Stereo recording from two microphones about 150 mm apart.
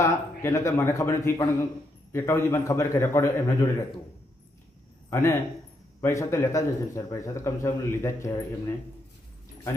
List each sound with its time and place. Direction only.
0.0 s a man's voice: 20° left (ahead or behind)
5.1 s a man's voice: 20° left (ahead or behind)